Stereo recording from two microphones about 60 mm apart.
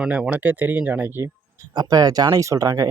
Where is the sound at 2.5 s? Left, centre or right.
Right.